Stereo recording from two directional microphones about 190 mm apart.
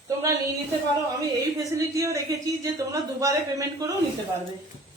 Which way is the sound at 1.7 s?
15° right (ahead or behind).